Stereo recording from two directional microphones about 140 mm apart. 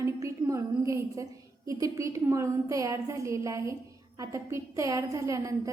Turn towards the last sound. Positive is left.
turn(degrees=-20)  # may be behind; listen again after turning